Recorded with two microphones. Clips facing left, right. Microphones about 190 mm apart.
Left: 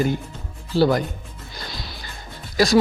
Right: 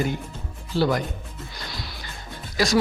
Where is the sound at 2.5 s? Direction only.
35° left (ahead or behind).